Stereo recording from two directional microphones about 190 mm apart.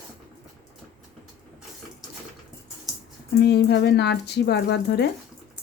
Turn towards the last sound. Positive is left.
turn(degrees=65)  # may be behind; listen again after turning